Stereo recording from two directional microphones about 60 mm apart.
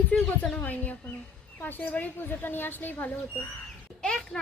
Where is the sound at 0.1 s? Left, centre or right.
Left.